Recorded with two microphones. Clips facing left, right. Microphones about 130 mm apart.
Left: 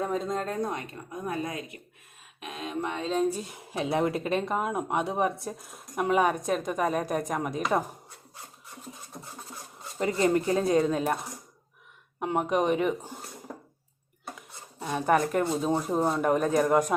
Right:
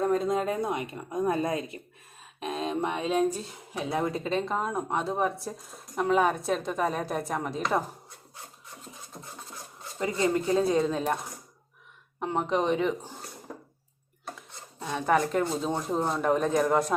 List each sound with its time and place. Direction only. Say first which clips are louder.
0.0 s a woman's voice: right 4 dB; centre (ahead or behind); by 1.8 s 30° right (ahead or behind)
2.4 s a sound: right 4 dB; 30° right (ahead or behind); by 3.3 s 10° right (ahead or behind)
3.7 s speech: left 2 dB; 25° left (ahead or behind); by 7.9 s 5° left (ahead or behind)
10.6 s speech: left 1 dB; centre (ahead or behind)
12.2 s speech: left 1 dB; 10° left (ahead or behind)
14.3 s dishes: left 1 dB; 10° left (ahead or behind)